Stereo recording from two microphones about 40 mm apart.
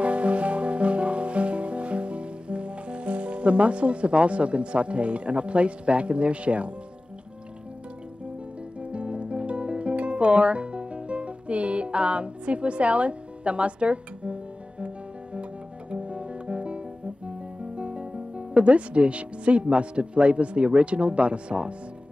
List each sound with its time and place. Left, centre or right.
0.0 s music: right
8.9 s music: right
15.9 s guitar: right
17.7 s speech: right